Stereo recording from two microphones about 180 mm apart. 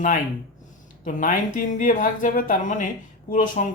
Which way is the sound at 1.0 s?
45° left (ahead or behind).